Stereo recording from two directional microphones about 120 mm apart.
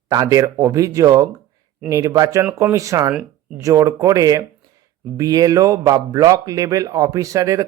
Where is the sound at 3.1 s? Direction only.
5° right (ahead or behind).